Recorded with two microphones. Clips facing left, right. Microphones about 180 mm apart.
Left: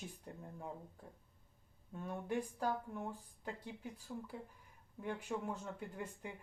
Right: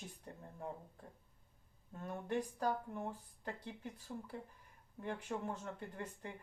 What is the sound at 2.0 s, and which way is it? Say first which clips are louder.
Speech: even; 5° left (ahead or behind).